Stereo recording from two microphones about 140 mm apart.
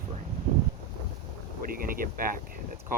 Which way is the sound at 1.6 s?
90° right.